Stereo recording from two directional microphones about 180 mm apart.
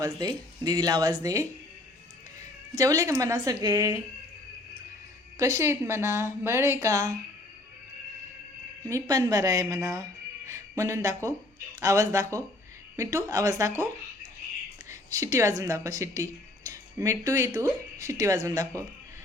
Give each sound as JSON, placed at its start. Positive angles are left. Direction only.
{"t": 0.0, "sound": "speech", "side_deg": -20}
{"t": 2.7, "sound": "speech", "side_deg": -20}
{"t": 5.4, "sound": "speech", "side_deg": -15}
{"t": 8.8, "sound": "speech", "side_deg": -15}
{"t": 14.8, "sound": "speech", "side_deg": -15}